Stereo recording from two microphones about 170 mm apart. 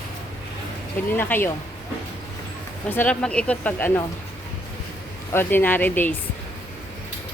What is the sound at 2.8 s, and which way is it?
A woman's voice, 10° left (ahead or behind).